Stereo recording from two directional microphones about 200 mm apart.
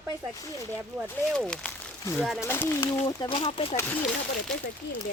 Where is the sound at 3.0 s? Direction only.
25° left (ahead or behind).